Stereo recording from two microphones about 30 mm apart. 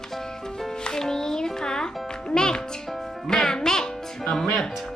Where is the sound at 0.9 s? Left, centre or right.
Centre.